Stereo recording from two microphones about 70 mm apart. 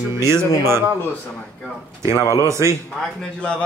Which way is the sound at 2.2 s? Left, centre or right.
Left.